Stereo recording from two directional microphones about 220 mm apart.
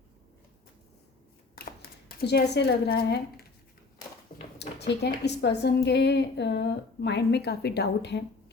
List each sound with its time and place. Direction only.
1.5 s a woman's voice: 45° left (ahead or behind)
4.5 s speech: 50° left (ahead or behind)